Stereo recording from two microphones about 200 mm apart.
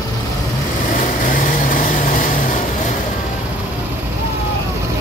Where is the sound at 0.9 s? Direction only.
40° left (ahead or behind).